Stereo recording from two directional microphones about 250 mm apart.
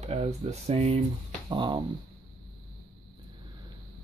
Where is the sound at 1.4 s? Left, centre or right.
Centre.